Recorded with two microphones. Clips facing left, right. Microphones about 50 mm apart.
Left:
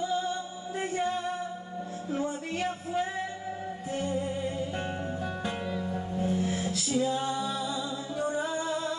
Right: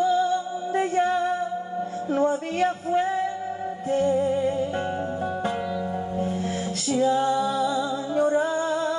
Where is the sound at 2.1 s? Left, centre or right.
Right.